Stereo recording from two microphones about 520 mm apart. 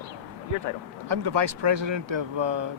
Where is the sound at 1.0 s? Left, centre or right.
Right.